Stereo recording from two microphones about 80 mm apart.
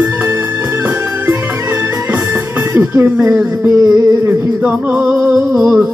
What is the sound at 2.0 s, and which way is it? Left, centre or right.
Speech, right.